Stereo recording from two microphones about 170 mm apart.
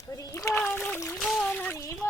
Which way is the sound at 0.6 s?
10° left (ahead or behind).